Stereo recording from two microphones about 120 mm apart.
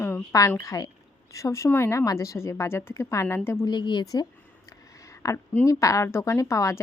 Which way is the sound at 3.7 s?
40° left (ahead or behind).